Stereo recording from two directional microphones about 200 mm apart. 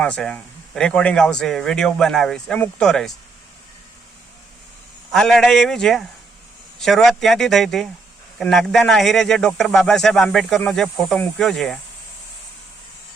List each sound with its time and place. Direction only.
0.0 s speech: 5° left (ahead or behind)
5.1 s speech: centre (ahead or behind)